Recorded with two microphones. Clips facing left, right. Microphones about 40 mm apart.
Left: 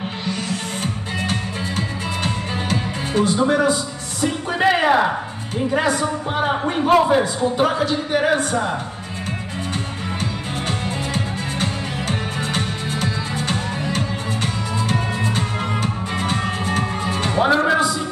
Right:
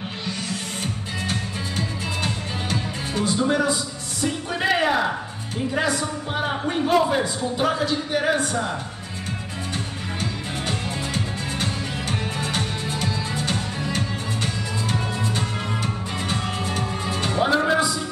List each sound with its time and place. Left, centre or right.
1.3 s music: left
3.3 s a man's voice: left
4.2 s music: left
5.7 s a man's voice: left
10.7 s music: centre
12.4 s music: left